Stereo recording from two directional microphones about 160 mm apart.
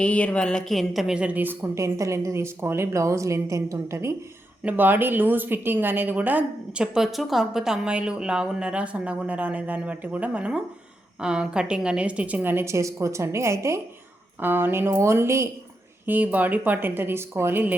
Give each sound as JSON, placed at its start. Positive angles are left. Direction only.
{"t": 0.0, "sound": "a woman's voice", "side_deg": 10}